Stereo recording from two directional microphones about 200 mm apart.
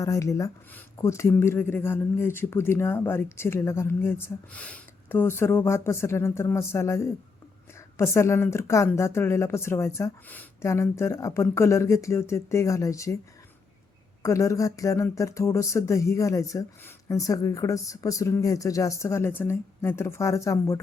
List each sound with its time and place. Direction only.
0.0 s speech: 15° left (ahead or behind)
14.2 s speech: 15° left (ahead or behind)